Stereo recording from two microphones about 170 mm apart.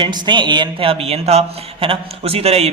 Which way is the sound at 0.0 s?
25° right (ahead or behind).